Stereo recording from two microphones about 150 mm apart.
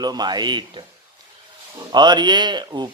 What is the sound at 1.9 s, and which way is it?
Speech, 30° right (ahead or behind).